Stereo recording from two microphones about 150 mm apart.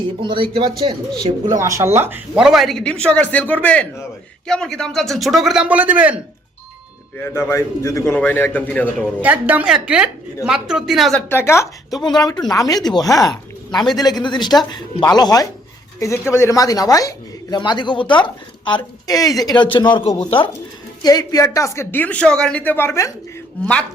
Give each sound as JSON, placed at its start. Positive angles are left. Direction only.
{"t": 0.2, "sound": "speech", "side_deg": -35}
{"t": 1.6, "sound": "speech", "side_deg": -20}
{"t": 7.3, "sound": "speech", "side_deg": 15}
{"t": 9.2, "sound": "a woman's voice", "side_deg": -10}
{"t": 11.3, "sound": "speech", "side_deg": 15}
{"t": 21.0, "sound": "speech", "side_deg": 25}